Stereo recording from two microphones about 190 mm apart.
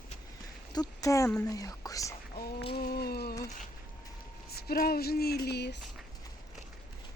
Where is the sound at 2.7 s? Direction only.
55° left (ahead or behind).